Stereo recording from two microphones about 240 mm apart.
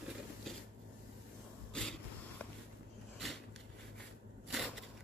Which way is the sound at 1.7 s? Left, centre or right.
Centre.